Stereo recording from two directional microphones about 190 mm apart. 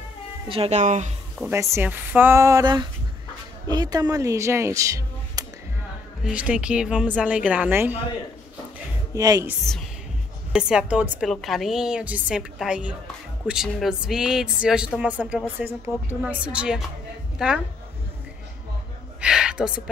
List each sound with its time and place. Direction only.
0.5 s speech: 35° right (ahead or behind)
1.4 s a woman's voice: 15° right (ahead or behind)
6.2 s a woman's voice: 5° right (ahead or behind)
9.1 s speech: 20° right (ahead or behind)
10.5 s a woman's voice: 5° right (ahead or behind)
19.2 s a sound: 5° right (ahead or behind)